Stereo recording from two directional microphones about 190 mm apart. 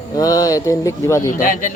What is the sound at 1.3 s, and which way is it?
Speech, 45° left (ahead or behind).